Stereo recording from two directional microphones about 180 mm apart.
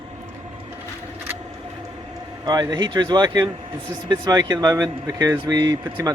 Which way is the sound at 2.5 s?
20° right (ahead or behind).